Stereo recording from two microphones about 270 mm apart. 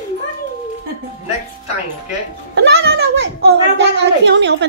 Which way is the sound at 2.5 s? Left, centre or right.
Right.